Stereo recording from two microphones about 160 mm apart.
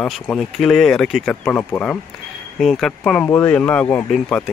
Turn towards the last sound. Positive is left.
turn(degrees=5)  # may be behind; listen again after turning